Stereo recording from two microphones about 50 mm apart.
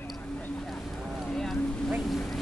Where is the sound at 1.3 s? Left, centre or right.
Centre.